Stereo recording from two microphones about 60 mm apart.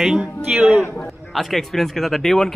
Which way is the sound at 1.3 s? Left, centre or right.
Centre.